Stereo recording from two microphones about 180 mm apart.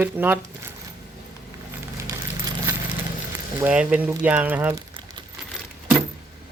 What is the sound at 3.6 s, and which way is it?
Speech, 5° right (ahead or behind).